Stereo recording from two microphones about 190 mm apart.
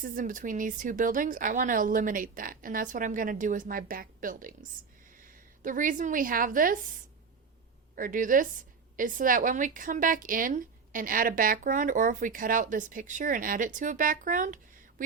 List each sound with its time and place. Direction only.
0.0 s a woman's voice: 45° right (ahead or behind)
5.6 s a woman's voice: 45° right (ahead or behind)
7.9 s a woman's voice: 45° right (ahead or behind)